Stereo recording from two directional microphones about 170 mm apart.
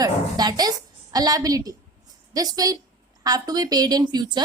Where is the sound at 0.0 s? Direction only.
25° right (ahead or behind).